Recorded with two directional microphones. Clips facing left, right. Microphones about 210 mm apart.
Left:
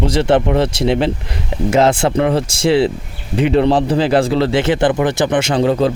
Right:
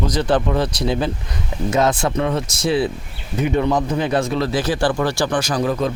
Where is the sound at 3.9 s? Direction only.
85° left.